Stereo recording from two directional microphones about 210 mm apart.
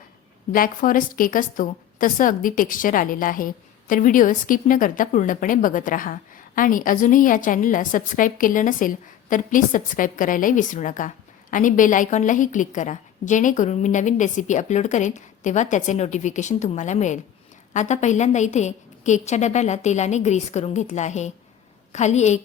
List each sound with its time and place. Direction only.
0.5 s a woman's voice: 40° left (ahead or behind)